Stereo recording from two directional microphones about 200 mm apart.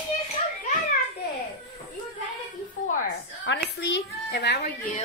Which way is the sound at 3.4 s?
60° left (ahead or behind).